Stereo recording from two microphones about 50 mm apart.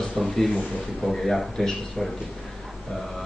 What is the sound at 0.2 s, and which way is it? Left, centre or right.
Speech, centre.